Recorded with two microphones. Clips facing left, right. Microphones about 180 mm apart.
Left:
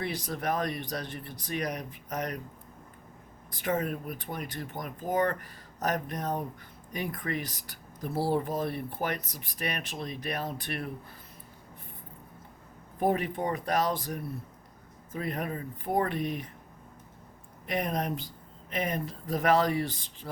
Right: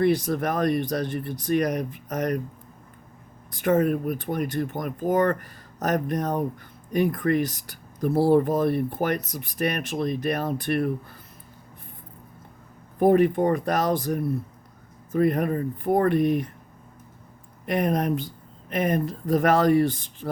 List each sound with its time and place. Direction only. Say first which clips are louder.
0.0 s speech: right 11 dB; 50° right (ahead or behind)
3.5 s speech: right 9 dB; 50° right (ahead or behind)
13.0 s speech: right 10 dB; 50° right (ahead or behind)
17.7 s speech: right 7 dB; 55° right (ahead or behind)